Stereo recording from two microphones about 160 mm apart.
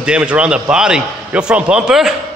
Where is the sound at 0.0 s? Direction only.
5° right (ahead or behind).